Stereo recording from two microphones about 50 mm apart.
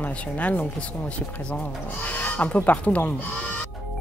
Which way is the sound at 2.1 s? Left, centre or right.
Left.